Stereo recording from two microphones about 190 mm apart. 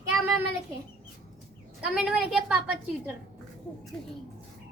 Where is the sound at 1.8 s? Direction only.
5° right (ahead or behind).